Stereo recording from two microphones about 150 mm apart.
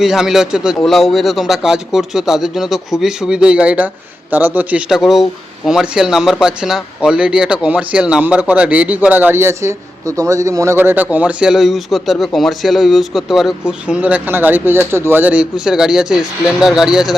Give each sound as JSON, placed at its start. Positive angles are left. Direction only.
{"t": 0.0, "sound": "speech", "side_deg": -5}